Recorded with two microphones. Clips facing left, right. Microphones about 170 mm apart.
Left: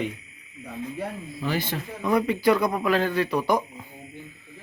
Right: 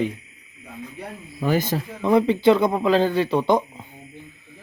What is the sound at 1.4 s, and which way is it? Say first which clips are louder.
Speech: right 6 dB; 45° right (ahead or behind).